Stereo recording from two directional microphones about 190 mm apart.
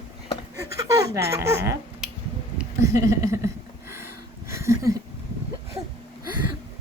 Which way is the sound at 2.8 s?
15° right (ahead or behind).